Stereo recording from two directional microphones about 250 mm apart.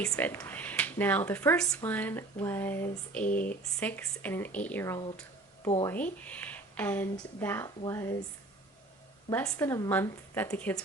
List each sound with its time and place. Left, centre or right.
0.1 s speech: centre
3.2 s speech: left
3.8 s speech: centre
9.3 s speech: centre